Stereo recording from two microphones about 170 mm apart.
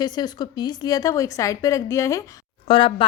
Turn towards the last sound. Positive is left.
turn(degrees=30)  # may be behind; listen again after turning